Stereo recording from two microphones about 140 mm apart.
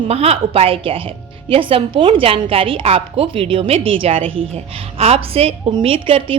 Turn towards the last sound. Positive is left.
turn(degrees=-40)  # may be behind; listen again after turning